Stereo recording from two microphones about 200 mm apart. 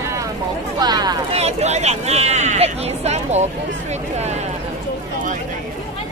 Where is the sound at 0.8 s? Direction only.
20° right (ahead or behind).